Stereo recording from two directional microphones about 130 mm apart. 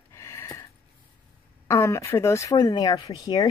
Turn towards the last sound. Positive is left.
turn(degrees=30)  # may be behind; listen again after turning